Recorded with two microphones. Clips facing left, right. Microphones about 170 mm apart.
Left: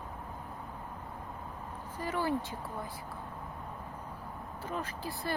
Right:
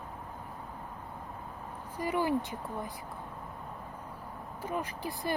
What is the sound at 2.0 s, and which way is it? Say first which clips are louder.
Speech: right 3 dB; 15° right (ahead or behind).